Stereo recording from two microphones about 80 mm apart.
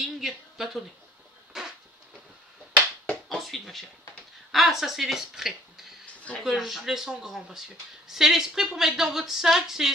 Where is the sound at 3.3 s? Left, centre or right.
Centre.